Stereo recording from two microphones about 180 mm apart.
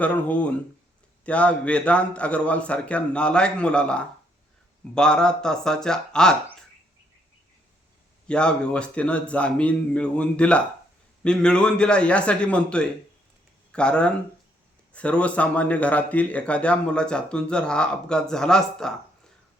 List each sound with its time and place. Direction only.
0.0 s a man's voice: 10° left (ahead or behind)
8.3 s a man's voice: 5° left (ahead or behind)